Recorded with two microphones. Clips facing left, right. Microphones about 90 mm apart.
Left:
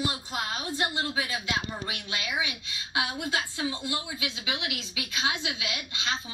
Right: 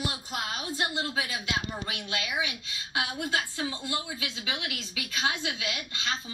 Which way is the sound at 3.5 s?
20° left (ahead or behind).